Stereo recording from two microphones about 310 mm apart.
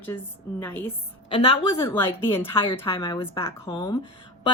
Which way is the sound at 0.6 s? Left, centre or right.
Centre.